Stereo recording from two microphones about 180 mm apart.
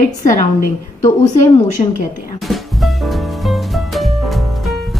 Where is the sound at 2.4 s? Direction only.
Centre (ahead or behind).